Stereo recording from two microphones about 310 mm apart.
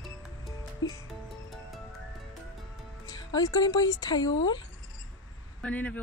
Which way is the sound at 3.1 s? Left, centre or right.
Centre.